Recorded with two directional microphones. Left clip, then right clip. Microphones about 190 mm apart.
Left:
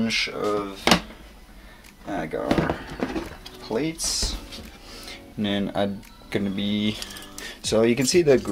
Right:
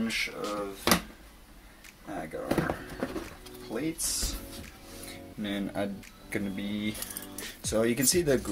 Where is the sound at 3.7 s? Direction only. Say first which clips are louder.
Left 9 dB; 85° left.